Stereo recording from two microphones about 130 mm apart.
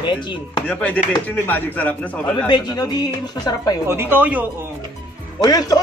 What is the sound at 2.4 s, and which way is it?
A woman's voice, 30° left (ahead or behind).